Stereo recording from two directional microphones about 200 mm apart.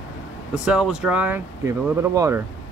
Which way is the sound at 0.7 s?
5° right (ahead or behind).